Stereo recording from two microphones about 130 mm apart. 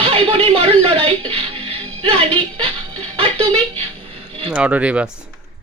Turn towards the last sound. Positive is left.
turn(degrees=-10)  # may be behind; listen again after turning